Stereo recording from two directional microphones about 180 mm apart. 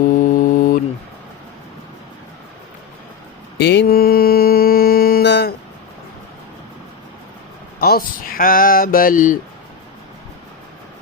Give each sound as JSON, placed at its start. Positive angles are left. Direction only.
{"t": 0.2, "sound": "mantra", "side_deg": 45}
{"t": 3.6, "sound": "mantra", "side_deg": 70}
{"t": 7.8, "sound": "a sound", "side_deg": 55}